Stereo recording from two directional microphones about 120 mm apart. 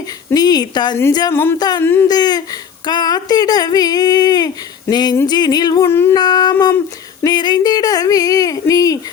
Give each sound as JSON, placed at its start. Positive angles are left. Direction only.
{"t": 0.3, "sound": "speech", "side_deg": 35}
{"t": 1.3, "sound": "a sound", "side_deg": 20}
{"t": 1.5, "sound": "speech", "side_deg": 35}
{"t": 1.8, "sound": "speech", "side_deg": 20}
{"t": 2.0, "sound": "speech", "side_deg": 35}
{"t": 5.8, "sound": "a sound", "side_deg": 20}
{"t": 6.1, "sound": "speech", "side_deg": 35}